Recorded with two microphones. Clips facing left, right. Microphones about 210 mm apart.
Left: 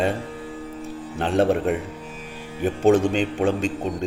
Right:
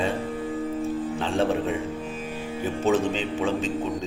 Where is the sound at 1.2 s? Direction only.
65° left (ahead or behind).